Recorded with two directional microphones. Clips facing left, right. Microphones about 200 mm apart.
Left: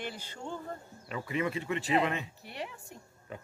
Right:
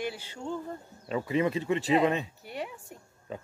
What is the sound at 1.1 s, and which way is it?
Speech, 25° right (ahead or behind).